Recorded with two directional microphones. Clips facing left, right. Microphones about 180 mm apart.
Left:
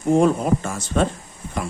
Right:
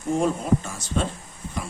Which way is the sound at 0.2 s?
65° left (ahead or behind).